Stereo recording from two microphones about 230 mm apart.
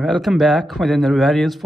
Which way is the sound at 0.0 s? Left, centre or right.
Centre.